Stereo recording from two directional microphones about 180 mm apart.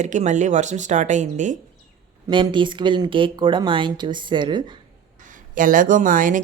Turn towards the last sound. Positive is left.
turn(degrees=-50)  # may be behind; listen again after turning